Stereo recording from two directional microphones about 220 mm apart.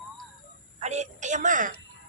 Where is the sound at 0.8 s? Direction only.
30° right (ahead or behind).